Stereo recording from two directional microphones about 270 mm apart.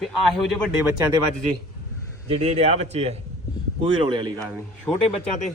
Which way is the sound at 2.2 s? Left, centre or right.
Right.